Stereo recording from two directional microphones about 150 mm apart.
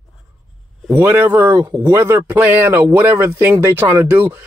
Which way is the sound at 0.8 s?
15° right (ahead or behind).